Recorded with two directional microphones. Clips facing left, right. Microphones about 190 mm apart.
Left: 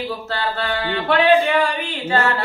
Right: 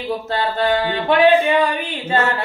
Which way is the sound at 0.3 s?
20° right (ahead or behind).